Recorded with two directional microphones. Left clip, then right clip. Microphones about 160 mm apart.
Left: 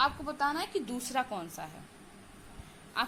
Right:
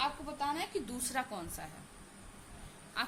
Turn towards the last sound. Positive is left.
turn(degrees=20)  # may be behind; listen again after turning